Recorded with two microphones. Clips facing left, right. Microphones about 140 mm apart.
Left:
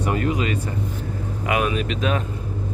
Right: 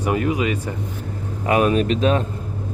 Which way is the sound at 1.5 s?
35° right (ahead or behind).